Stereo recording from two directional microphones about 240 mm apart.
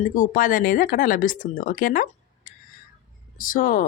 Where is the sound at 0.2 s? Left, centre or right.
Left.